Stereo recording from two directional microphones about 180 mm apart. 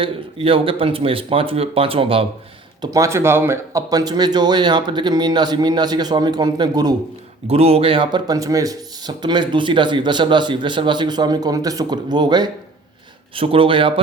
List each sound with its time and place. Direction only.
0.0 s speech: 30° right (ahead or behind)
2.8 s speech: 20° right (ahead or behind)
7.4 s speech: 35° right (ahead or behind)